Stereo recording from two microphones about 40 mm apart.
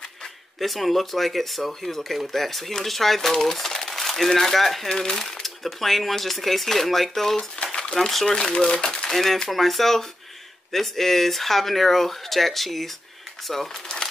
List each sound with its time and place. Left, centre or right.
0.6 s speech: centre
4.8 s speech: centre
5.1 s speech: centre
7.5 s a sound: left
8.0 s speech: centre
8.3 s speech: centre
9.1 s speech: centre
13.9 s crumpling: left